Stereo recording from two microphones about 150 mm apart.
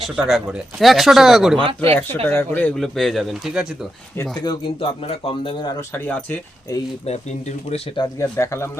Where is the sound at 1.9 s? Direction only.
10° left (ahead or behind); by 3.7 s 5° right (ahead or behind).